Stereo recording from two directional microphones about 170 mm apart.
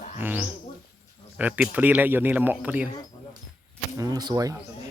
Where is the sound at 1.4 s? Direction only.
10° right (ahead or behind).